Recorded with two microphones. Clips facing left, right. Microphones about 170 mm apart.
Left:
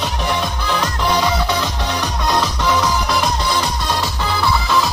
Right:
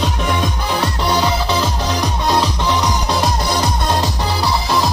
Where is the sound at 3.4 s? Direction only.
40° right (ahead or behind).